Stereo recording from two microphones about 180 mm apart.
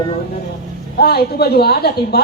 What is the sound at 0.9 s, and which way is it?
A woman's voice, 60° left (ahead or behind).